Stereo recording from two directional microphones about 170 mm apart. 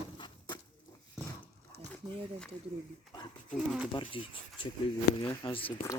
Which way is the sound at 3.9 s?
30° left (ahead or behind).